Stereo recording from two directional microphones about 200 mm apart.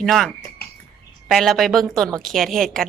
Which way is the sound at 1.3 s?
Centre (ahead or behind).